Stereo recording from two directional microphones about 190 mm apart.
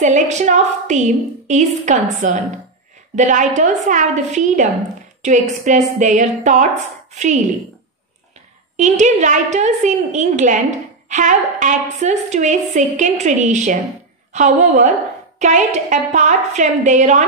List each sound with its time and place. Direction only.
0.0 s a woman's voice: 40° right (ahead or behind)
8.7 s a woman's voice: 40° right (ahead or behind)